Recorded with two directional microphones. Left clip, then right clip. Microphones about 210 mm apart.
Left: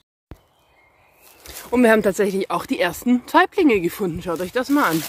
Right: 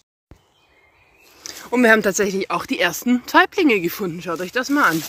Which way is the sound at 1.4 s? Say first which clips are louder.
Even; centre (ahead or behind).